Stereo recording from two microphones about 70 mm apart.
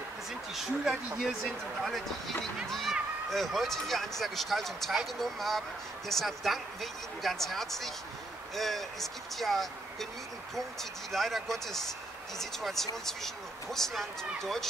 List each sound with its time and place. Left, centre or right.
0.3 s speech: centre
1.4 s speech: centre